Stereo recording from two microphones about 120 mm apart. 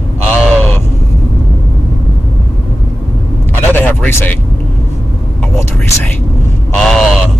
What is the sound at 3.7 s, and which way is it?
Speech, 15° left (ahead or behind).